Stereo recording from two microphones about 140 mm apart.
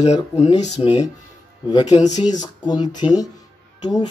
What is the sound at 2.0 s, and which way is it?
Speech, 60° left (ahead or behind).